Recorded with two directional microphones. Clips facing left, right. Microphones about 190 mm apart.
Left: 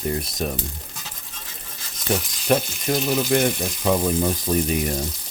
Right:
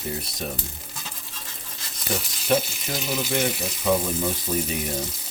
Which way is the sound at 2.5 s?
55° left (ahead or behind).